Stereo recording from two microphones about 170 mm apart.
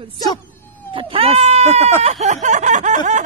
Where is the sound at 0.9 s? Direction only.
30° right (ahead or behind).